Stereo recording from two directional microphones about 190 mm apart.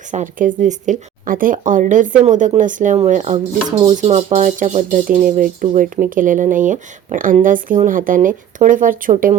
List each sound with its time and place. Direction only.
0.1 s speech: 40° right (ahead or behind)